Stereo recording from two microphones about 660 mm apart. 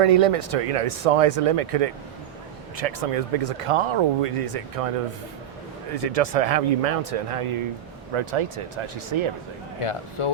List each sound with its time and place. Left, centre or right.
0.0 s speech: right
6.1 s speech: right
9.8 s speech: left